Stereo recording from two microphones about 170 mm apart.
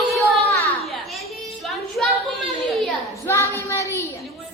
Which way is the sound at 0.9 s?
Centre (ahead or behind).